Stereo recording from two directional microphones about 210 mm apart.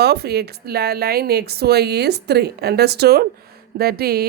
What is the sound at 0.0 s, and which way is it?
A woman's voice, 50° right (ahead or behind).